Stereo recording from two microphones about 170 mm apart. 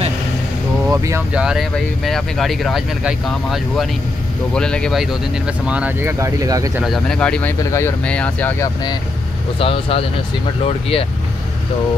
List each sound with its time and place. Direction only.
0.8 s speech: 15° right (ahead or behind)
1.4 s speech: centre (ahead or behind)
5.7 s speech: 10° right (ahead or behind)
6.8 s speech: centre (ahead or behind)
9.6 s speech: 35° left (ahead or behind)